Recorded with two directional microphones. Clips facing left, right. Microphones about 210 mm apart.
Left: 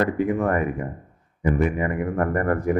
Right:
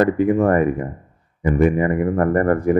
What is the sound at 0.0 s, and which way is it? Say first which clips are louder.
Speech: right 6 dB; 35° right (ahead or behind).